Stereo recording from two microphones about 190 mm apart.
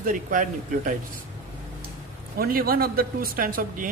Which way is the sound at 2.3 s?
50° right (ahead or behind).